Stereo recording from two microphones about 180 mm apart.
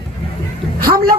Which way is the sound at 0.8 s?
55° right (ahead or behind).